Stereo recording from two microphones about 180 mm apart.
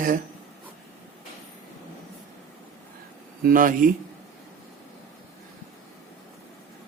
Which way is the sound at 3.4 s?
50° right (ahead or behind).